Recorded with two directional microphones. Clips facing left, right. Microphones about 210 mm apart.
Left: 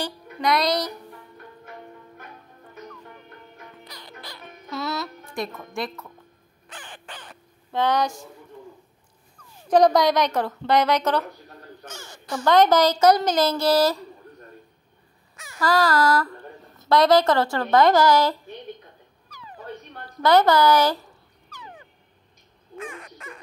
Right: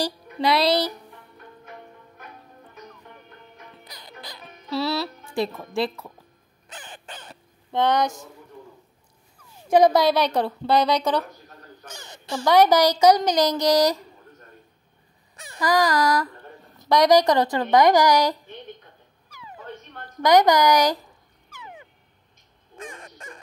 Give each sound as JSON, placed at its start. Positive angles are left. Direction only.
{"t": 0.0, "sound": "music", "side_deg": -30}
{"t": 4.6, "sound": "speech", "side_deg": -30}
{"t": 9.4, "sound": "speech", "side_deg": -10}
{"t": 11.9, "sound": "a sound", "side_deg": -20}
{"t": 12.4, "sound": "speech", "side_deg": -15}
{"t": 15.3, "sound": "a sound", "side_deg": -35}
{"t": 15.6, "sound": "speech", "side_deg": -15}
{"t": 20.2, "sound": "speech", "side_deg": -15}
{"t": 21.5, "sound": "dog", "side_deg": -15}
{"t": 22.8, "sound": "a sound", "side_deg": -30}